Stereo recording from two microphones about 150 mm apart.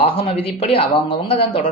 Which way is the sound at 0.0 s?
40° left (ahead or behind).